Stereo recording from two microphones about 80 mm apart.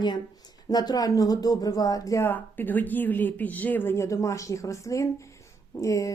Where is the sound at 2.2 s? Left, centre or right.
Left.